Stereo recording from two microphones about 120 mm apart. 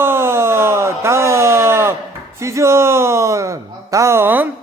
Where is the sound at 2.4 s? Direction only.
25° right (ahead or behind).